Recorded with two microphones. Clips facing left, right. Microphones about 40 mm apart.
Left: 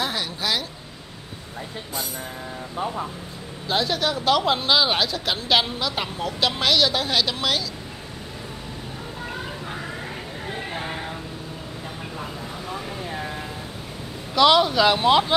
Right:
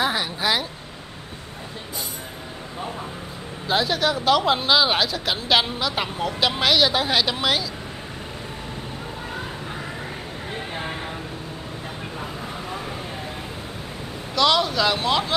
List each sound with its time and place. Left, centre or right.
0.0 s a sound: centre
3.6 s speech: centre
14.3 s speech: centre